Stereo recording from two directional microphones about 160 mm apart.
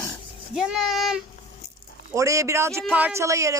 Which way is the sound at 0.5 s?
5° right (ahead or behind).